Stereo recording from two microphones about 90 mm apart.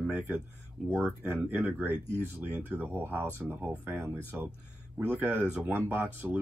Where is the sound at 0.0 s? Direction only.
20° right (ahead or behind).